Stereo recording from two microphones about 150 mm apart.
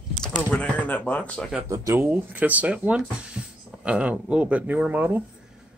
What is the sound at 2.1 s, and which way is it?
Speech, 10° right (ahead or behind).